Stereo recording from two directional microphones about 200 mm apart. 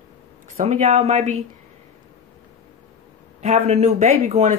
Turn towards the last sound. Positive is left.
turn(degrees=-35)  # may be behind; listen again after turning